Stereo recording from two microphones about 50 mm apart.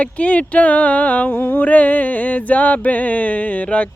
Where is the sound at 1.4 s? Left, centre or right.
Left.